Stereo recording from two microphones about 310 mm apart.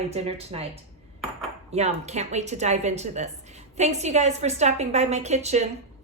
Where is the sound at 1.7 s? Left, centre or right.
Right.